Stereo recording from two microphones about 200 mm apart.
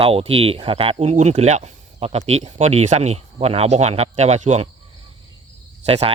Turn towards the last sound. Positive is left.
turn(degrees=-30)  # may be behind; listen again after turning